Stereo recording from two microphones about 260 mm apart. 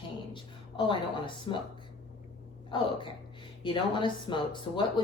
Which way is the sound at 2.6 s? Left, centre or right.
Centre.